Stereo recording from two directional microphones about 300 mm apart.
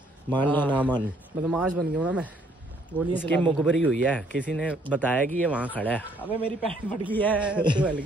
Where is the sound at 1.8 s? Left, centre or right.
Centre.